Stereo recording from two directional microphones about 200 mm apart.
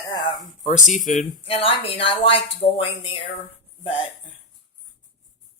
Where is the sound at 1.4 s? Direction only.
30° left (ahead or behind).